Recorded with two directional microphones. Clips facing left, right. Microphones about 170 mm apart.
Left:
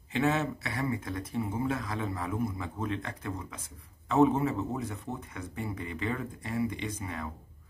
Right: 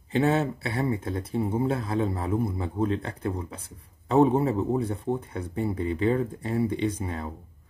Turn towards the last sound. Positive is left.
turn(degrees=-30)  # may be behind; listen again after turning